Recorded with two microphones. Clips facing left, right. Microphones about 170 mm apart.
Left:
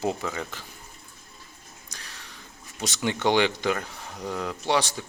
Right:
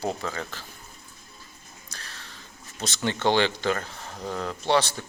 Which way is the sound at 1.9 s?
15° left (ahead or behind).